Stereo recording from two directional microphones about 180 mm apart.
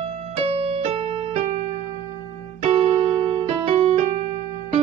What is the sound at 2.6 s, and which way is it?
Music, 30° right (ahead or behind).